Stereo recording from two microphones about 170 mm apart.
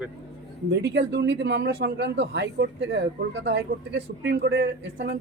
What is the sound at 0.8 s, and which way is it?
Speech, 90° right.